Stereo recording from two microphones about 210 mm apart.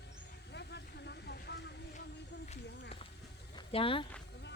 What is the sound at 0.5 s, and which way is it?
Vehicle, 55° left (ahead or behind).